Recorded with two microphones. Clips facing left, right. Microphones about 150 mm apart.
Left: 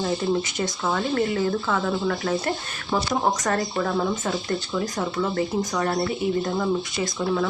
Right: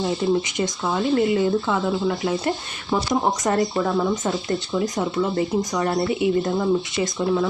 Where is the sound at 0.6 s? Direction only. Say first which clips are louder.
Right 2 dB; 15° right (ahead or behind).